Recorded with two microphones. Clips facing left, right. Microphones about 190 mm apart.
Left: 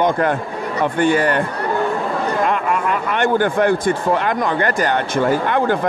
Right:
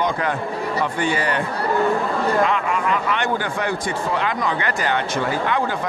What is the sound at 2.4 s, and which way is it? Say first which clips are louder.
Speech: left 2 dB; 50° left (ahead or behind).